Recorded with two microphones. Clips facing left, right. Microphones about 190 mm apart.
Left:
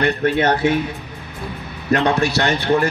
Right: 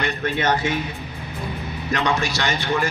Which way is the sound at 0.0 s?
60° left (ahead or behind).